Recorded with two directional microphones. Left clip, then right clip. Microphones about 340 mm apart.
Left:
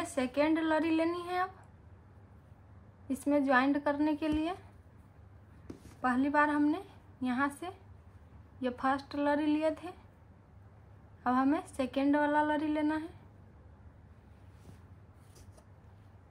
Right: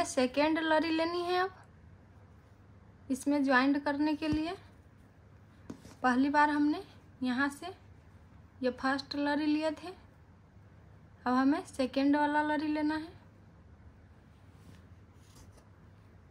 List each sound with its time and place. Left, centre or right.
0.0 s a woman's voice: centre
3.1 s a woman's voice: centre
5.9 s a woman's voice: centre
11.2 s a woman's voice: centre